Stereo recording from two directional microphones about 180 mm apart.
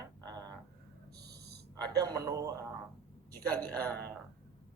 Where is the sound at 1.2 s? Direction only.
65° right (ahead or behind).